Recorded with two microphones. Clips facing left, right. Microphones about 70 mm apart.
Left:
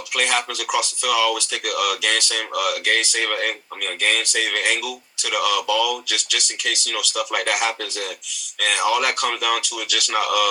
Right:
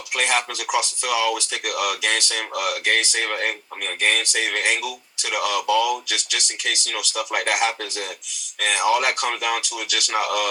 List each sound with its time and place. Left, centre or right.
0.1 s speech: right